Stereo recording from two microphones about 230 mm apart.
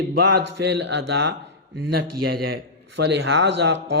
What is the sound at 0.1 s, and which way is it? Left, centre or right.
Speech, right.